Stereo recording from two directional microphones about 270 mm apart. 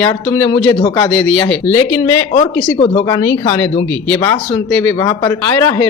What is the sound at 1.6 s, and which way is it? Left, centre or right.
Speech, centre.